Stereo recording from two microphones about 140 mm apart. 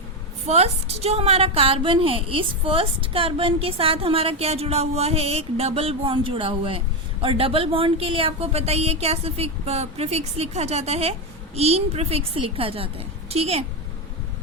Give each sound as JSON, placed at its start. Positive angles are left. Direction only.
{"t": 0.4, "sound": "a woman's voice", "side_deg": -50}